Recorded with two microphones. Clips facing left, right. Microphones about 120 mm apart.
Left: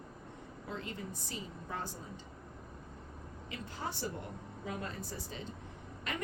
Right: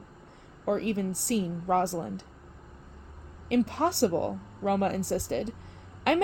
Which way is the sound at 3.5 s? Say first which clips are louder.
Right 17 dB; 75° right (ahead or behind).